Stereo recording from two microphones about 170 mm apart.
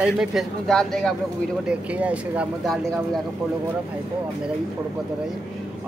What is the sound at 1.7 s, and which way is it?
Speech, 10° right (ahead or behind).